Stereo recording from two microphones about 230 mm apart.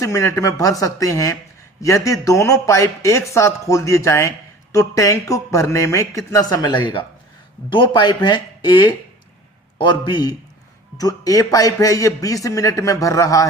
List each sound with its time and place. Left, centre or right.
0.0 s a man's voice: centre